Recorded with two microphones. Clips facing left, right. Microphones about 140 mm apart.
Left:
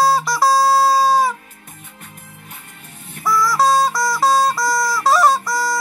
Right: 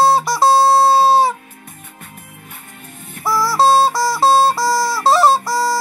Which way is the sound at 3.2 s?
30° right (ahead or behind).